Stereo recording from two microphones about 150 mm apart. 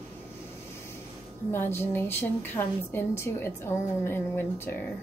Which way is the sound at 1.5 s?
15° left (ahead or behind).